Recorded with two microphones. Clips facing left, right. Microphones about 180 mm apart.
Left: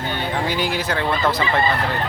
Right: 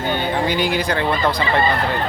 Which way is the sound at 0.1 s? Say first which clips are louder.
Right 4 dB; centre (ahead or behind).